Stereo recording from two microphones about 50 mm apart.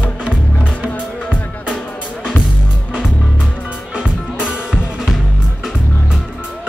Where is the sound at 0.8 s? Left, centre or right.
Right.